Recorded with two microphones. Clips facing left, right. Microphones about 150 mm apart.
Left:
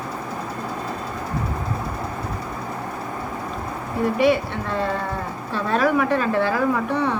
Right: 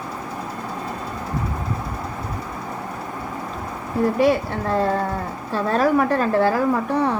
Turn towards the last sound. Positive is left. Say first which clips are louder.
# right 1 dB
turn(degrees=-35)  # may be behind; listen again after turning